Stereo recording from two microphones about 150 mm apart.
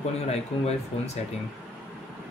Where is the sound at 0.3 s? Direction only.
45° left (ahead or behind).